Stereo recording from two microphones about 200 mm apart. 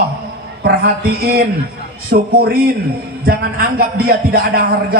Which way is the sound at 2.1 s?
50° right (ahead or behind).